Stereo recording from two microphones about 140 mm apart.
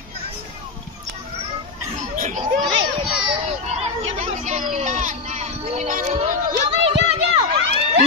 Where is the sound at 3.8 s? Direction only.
50° right (ahead or behind).